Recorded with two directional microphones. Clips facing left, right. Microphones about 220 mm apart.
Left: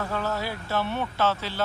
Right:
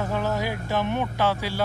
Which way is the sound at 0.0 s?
15° right (ahead or behind).